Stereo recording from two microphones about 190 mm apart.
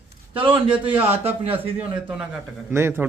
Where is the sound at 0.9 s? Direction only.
10° right (ahead or behind).